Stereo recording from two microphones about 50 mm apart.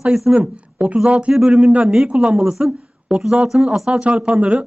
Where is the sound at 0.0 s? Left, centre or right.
Centre.